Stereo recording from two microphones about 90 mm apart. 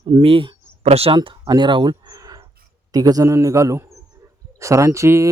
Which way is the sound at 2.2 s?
40° right (ahead or behind).